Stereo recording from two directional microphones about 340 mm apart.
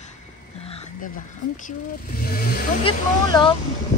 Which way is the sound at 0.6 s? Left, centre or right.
Centre.